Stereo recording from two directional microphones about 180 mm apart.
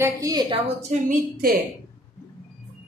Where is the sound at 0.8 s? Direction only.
40° right (ahead or behind).